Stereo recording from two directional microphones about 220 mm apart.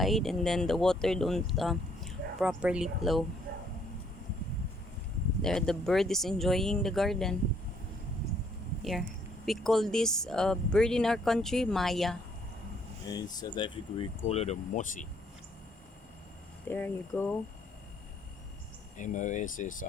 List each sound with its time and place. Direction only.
0.0 s speech: centre (ahead or behind)
5.4 s speech: centre (ahead or behind)
8.8 s speech: centre (ahead or behind)
13.1 s speech: 20° left (ahead or behind); by 15.0 s 35° left (ahead or behind)
16.6 s speech: 10° left (ahead or behind)
18.9 s speech: 35° left (ahead or behind)